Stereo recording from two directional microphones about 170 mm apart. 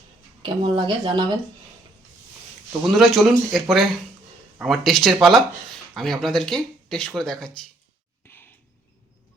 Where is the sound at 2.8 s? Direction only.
Centre (ahead or behind).